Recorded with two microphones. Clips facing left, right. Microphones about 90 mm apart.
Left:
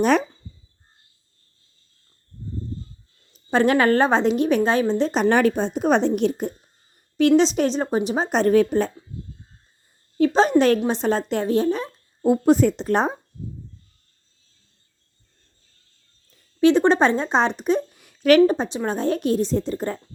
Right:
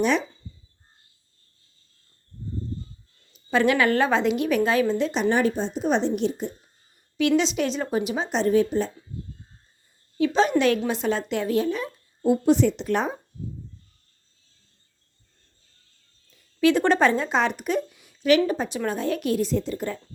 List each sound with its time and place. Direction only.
0.0 s speech: 50° left (ahead or behind)
3.5 s a woman's voice: 40° left (ahead or behind)
5.3 s a woman's voice: 70° left (ahead or behind)
7.2 s a woman's voice: 40° left (ahead or behind)
8.4 s a woman's voice: 60° left (ahead or behind)
10.2 s a woman's voice: 40° left (ahead or behind)
12.2 s a woman's voice: 45° left (ahead or behind)
16.6 s speech: 25° left (ahead or behind)
17.9 s a sound: 55° left (ahead or behind)
18.4 s a woman's voice: 30° left (ahead or behind)